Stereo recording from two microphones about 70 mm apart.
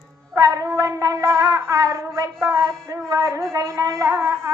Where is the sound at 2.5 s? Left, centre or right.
Right.